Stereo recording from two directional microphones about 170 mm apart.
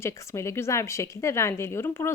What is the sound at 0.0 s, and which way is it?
Speech, 15° left (ahead or behind).